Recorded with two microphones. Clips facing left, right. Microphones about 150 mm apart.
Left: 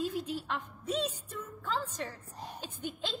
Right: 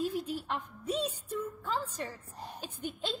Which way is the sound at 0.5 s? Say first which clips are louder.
Right 1 dB; 10° right (ahead or behind).